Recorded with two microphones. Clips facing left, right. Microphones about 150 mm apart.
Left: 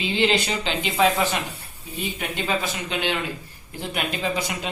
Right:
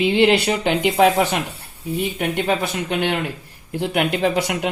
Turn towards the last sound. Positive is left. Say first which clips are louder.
# right 7 dB
turn(degrees=-65)  # may be behind; listen again after turning